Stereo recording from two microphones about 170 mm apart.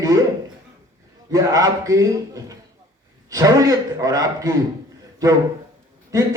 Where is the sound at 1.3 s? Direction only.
20° right (ahead or behind).